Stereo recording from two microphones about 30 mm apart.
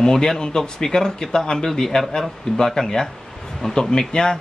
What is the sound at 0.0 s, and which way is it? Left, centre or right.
Speech, centre.